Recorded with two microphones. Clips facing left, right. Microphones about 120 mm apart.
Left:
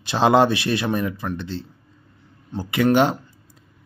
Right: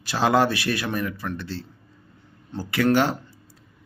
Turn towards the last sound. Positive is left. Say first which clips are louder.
# left 3 dB
turn(degrees=20)  # may be behind; listen again after turning